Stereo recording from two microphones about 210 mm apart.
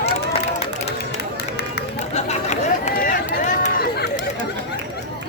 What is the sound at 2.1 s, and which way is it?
Run, 30° left (ahead or behind).